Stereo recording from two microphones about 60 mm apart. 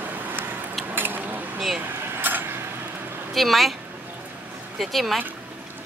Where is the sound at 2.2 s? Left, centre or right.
Right.